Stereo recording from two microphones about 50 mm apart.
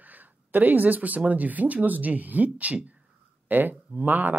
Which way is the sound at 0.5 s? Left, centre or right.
Right.